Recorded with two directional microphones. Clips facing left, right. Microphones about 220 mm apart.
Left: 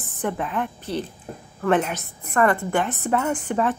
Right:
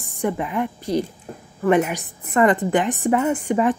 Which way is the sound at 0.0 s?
10° right (ahead or behind).